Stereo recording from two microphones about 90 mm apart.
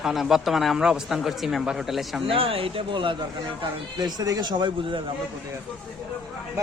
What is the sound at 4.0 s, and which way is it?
A man's voice, 50° right (ahead or behind).